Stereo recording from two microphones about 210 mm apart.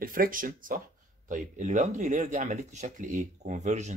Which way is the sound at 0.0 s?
40° right (ahead or behind).